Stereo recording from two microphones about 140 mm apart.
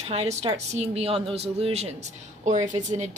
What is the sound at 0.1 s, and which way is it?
Speech, 50° right (ahead or behind).